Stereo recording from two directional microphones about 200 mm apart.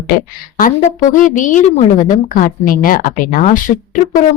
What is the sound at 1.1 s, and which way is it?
A woman's voice, 40° left (ahead or behind).